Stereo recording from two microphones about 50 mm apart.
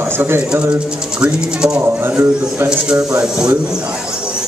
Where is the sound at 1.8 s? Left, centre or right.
Right.